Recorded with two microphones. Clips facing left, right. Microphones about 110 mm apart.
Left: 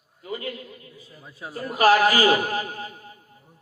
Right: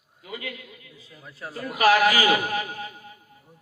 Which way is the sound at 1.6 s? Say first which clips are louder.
Left 1 dB; 35° left (ahead or behind).